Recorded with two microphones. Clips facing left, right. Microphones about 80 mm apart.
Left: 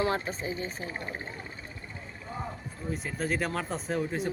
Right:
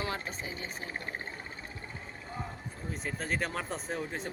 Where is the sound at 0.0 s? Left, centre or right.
Left.